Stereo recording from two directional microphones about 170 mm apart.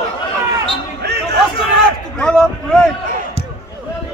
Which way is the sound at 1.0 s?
75° right (ahead or behind).